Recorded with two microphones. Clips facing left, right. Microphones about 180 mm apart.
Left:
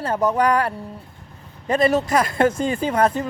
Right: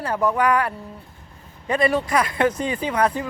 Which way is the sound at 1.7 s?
40° left (ahead or behind).